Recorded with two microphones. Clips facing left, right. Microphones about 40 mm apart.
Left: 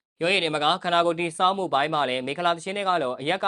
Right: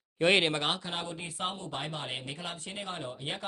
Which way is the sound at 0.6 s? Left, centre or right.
Left.